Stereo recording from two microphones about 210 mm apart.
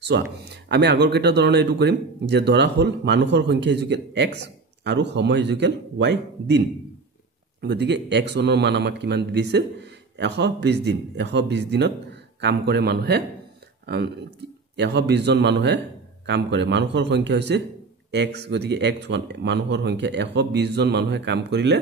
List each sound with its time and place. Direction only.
0.0 s a man's voice: 55° right (ahead or behind)